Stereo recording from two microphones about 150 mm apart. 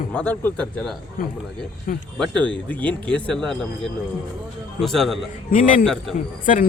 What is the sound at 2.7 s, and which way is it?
Speech, 10° left (ahead or behind).